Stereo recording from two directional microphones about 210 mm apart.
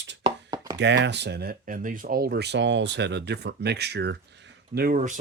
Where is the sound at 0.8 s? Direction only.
55° right (ahead or behind).